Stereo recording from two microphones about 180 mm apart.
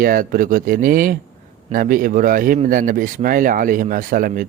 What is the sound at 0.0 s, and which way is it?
A man's voice, 50° right (ahead or behind).